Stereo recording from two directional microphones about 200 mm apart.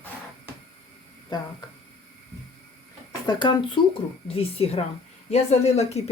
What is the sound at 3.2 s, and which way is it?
Speech, 20° left (ahead or behind).